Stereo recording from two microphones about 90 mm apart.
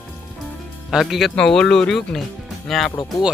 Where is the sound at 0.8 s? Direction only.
Centre (ahead or behind).